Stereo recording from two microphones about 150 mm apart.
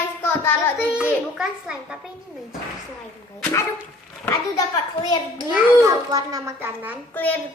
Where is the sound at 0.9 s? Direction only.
5° right (ahead or behind).